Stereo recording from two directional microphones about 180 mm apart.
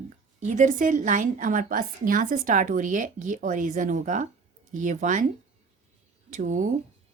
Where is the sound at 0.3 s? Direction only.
45° right (ahead or behind).